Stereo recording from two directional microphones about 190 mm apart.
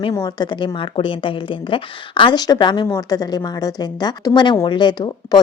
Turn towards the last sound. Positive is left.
turn(degrees=20)  # may be behind; listen again after turning